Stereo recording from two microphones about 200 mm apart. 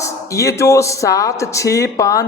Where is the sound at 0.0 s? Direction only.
15° left (ahead or behind).